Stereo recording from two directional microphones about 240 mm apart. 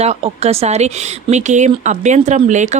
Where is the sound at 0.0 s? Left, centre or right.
Right.